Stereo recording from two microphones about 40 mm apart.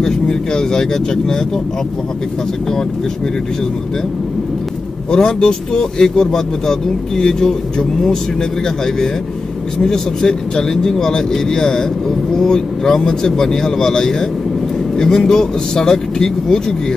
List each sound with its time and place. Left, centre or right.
0.0 s speech: centre
5.1 s speech: centre
9.8 s speech: centre